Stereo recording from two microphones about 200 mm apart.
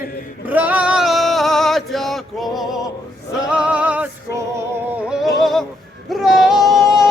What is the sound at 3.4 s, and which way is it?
Music, 5° right (ahead or behind).